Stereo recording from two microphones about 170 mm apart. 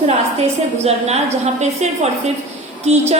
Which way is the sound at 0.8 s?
40° right (ahead or behind).